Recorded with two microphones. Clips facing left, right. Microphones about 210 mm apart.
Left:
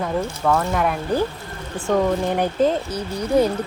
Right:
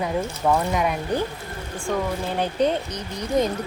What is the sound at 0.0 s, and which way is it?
Speech, 10° right (ahead or behind).